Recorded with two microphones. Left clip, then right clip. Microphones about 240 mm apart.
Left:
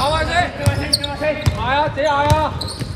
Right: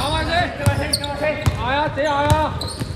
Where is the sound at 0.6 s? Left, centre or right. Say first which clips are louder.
Left 2 dB; centre.